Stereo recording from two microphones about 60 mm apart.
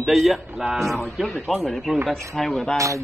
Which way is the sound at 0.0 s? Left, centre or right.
Centre.